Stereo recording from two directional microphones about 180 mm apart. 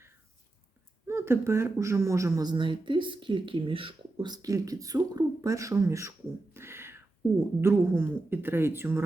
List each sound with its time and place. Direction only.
1.0 s speech: 15° right (ahead or behind)